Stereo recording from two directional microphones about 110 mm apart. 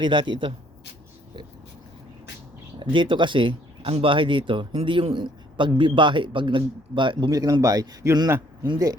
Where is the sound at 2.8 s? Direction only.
50° right (ahead or behind).